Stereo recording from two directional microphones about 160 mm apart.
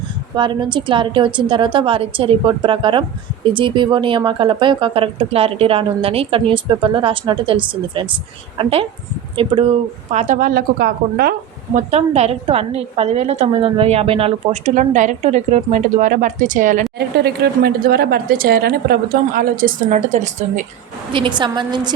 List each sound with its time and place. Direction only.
0.3 s speech: 30° right (ahead or behind)
10.1 s a woman's voice: 50° right (ahead or behind); by 11.3 s 70° right (ahead or behind)
11.7 s a woman's voice: 45° right (ahead or behind)
17.2 s a woman's voice: 85° right; by 20.7 s 50° right (ahead or behind)
21.1 s a woman's voice: 30° right (ahead or behind)